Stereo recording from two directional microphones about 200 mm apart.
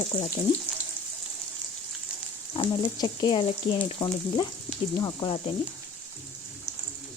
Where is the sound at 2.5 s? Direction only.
20° left (ahead or behind).